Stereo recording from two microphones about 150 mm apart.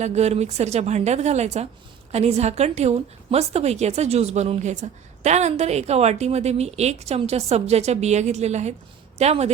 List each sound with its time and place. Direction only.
0.0 s a woman's voice: 50° right (ahead or behind)